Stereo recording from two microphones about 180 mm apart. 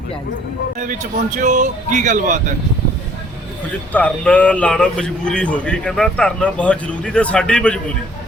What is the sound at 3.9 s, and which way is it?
A man's voice, 5° left (ahead or behind).